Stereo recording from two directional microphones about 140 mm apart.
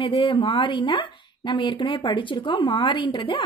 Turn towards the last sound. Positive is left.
turn(degrees=35)  # may be behind; listen again after turning